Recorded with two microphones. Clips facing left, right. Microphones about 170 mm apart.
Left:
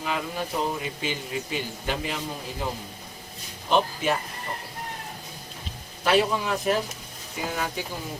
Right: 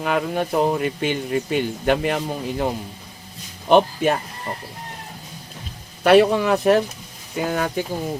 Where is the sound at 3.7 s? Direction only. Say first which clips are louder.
Right 7 dB; 55° right (ahead or behind).